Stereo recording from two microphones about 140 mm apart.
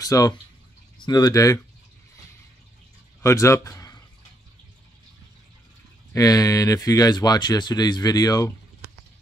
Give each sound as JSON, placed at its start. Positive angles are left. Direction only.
{"t": 0.0, "sound": "speech", "side_deg": 25}
{"t": 3.2, "sound": "speech", "side_deg": 20}
{"t": 6.1, "sound": "speech", "side_deg": 25}